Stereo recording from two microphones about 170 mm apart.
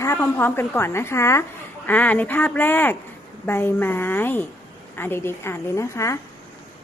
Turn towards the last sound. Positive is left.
turn(degrees=15)  # may be behind; listen again after turning